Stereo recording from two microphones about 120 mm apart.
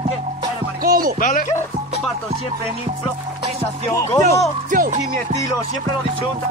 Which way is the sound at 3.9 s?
25° left (ahead or behind).